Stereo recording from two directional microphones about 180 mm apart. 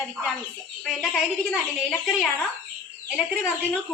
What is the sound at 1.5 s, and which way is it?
Speech, centre (ahead or behind).